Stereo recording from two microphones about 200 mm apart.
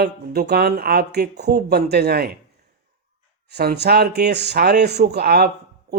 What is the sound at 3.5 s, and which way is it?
Speech, 55° right (ahead or behind).